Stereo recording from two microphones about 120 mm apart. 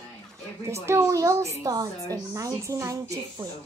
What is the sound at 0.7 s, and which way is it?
A woman's voice, 25° right (ahead or behind).